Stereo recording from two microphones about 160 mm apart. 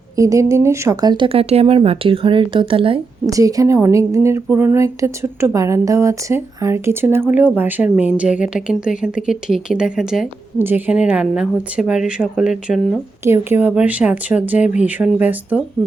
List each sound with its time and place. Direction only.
0.2 s speech: 20° right (ahead or behind)
3.2 s speech: 20° right (ahead or behind); by 13.0 s 5° right (ahead or behind)
13.2 s speech: 15° right (ahead or behind)